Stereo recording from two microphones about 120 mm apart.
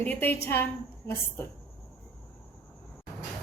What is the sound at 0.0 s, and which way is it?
A woman's voice, 15° left (ahead or behind).